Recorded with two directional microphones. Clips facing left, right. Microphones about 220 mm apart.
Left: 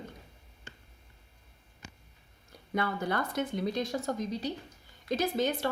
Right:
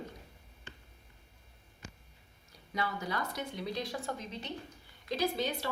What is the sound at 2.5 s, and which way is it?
Speech, 55° left (ahead or behind).